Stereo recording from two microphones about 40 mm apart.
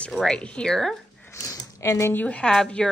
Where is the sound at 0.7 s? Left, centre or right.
Centre.